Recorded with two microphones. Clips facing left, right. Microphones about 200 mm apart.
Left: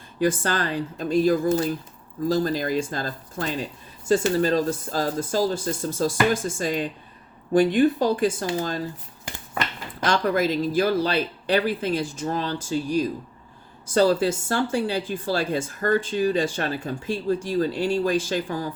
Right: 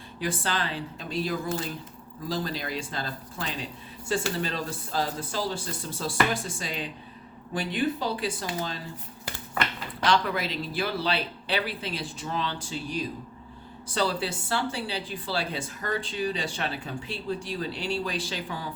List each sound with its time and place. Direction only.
0.2 s speech: 45° left (ahead or behind)
10.0 s speech: 45° left (ahead or behind)